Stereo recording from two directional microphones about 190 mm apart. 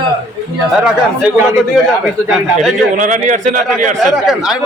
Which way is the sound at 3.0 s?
40° right (ahead or behind).